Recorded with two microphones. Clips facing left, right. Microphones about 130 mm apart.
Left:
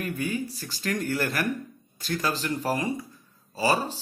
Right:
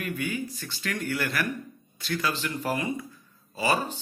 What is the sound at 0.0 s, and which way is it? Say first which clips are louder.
Speech: left 2 dB; 35° left (ahead or behind).